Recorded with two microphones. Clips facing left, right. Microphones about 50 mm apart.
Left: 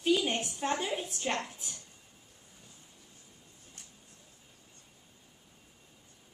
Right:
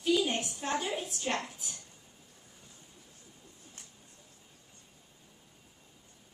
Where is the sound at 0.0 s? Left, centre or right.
Left.